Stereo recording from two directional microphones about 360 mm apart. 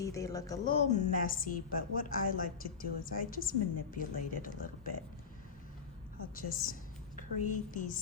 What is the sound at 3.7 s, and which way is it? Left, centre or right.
Speech, left.